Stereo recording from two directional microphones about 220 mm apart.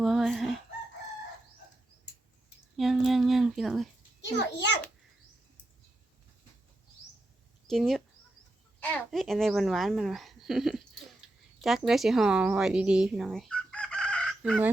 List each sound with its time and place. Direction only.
0.0 s chicken: centre (ahead or behind)
2.7 s speech: centre (ahead or behind)
4.2 s a child's voice: 55° left (ahead or behind)
7.7 s speech: centre (ahead or behind)